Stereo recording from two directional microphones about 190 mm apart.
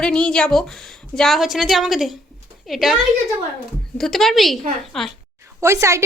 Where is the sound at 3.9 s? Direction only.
Centre (ahead or behind).